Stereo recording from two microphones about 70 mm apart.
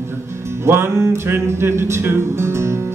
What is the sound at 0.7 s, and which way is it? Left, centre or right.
Music, right.